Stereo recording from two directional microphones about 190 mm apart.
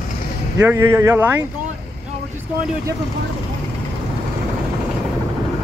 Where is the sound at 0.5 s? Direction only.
15° right (ahead or behind).